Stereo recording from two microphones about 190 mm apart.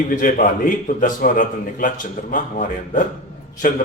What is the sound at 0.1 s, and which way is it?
A man's voice, 45° left (ahead or behind).